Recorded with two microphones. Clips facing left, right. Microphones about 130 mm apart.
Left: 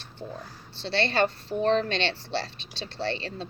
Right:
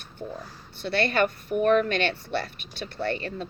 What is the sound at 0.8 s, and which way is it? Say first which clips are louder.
Speech: right 1 dB; 25° left (ahead or behind).